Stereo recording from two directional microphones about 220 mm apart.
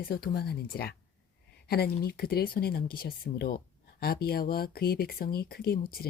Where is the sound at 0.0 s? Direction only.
45° left (ahead or behind).